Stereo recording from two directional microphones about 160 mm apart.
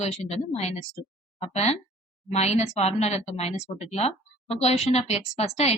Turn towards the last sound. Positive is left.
turn(degrees=40)  # may be behind; listen again after turning